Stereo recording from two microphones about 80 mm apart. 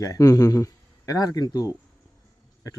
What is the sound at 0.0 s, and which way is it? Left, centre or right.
A man's voice, left.